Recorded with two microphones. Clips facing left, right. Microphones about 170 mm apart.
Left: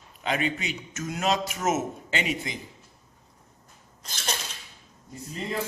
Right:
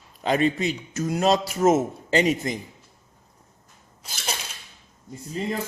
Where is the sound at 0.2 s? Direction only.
35° right (ahead or behind).